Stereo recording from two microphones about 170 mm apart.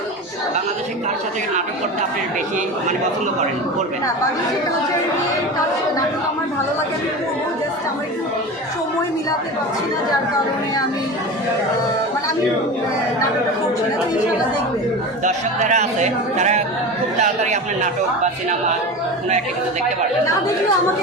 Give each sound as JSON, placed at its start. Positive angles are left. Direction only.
{"t": 15.2, "sound": "speech", "side_deg": -45}